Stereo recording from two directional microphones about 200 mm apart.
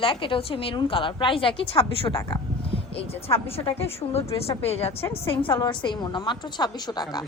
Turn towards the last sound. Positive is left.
turn(degrees=20)  # may be behind; listen again after turning